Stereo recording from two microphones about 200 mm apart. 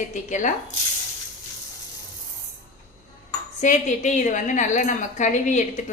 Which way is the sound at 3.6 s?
40° left (ahead or behind).